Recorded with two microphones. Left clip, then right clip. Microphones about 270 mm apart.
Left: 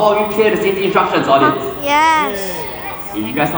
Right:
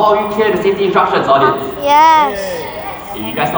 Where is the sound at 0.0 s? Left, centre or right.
Centre.